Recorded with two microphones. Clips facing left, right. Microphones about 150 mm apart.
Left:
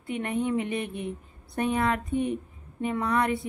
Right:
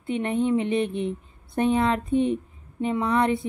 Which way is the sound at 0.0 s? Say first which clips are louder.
Right 4 dB; 25° right (ahead or behind).